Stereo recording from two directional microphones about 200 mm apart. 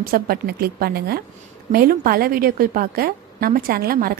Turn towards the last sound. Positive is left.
turn(degrees=-45)  # may be behind; listen again after turning